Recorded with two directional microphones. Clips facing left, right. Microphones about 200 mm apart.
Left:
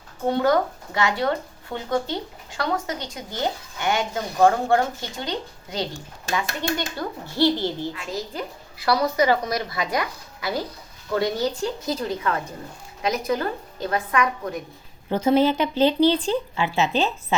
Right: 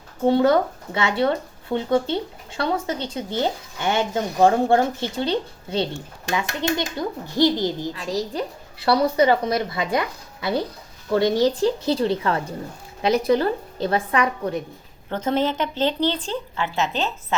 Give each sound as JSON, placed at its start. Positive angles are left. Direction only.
{"t": 0.3, "sound": "a woman's voice", "side_deg": -25}
{"t": 7.9, "sound": "a woman's voice", "side_deg": -35}
{"t": 15.1, "sound": "speech", "side_deg": 10}